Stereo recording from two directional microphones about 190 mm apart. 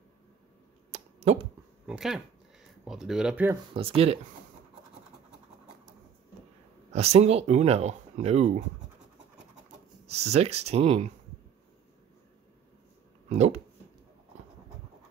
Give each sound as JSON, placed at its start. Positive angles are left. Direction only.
{"t": 0.9, "sound": "a sound", "side_deg": -35}
{"t": 1.9, "sound": "speech", "side_deg": 0}
{"t": 3.7, "sound": "speech", "side_deg": -30}
{"t": 6.9, "sound": "speech", "side_deg": -35}
{"t": 10.0, "sound": "speech", "side_deg": -35}
{"t": 13.3, "sound": "speech", "side_deg": -35}